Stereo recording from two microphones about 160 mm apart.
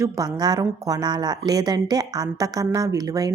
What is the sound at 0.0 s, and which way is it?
A woman's voice, 25° right (ahead or behind).